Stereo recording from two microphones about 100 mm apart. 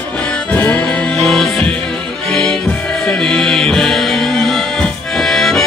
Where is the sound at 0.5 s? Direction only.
15° left (ahead or behind).